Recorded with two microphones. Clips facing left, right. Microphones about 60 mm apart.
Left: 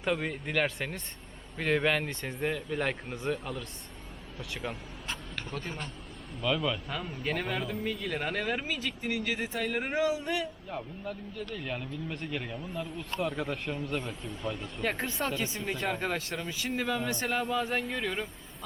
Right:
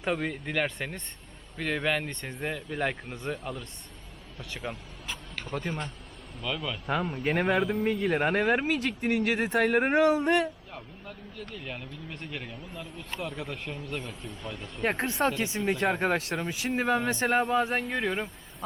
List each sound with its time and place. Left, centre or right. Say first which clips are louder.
0.0 s speech: right 1 dB; centre
5.5 s speech: right 6 dB; right
6.4 s speech: left 4 dB; centre
6.9 s speech: right 6 dB; right
7.6 s speech: right 7 dB; centre
8.0 s speech: right 8 dB; right
10.7 s speech: left 6 dB; centre
14.8 s speech: right 5 dB; right
15.5 s speech: right 6 dB; right
17.8 s speech: right 3 dB; centre